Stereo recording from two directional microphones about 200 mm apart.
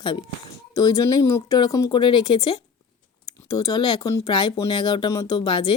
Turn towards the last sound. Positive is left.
turn(degrees=25)  # may be behind; listen again after turning